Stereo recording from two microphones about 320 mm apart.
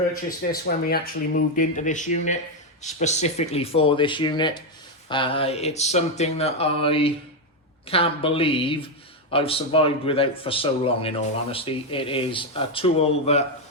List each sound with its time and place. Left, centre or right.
0.5 s speech: left